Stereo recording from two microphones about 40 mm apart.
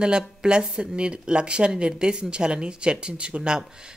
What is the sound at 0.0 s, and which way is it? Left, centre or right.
Speech, right.